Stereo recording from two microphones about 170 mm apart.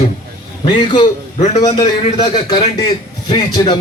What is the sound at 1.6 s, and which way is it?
A man's voice, 30° left (ahead or behind).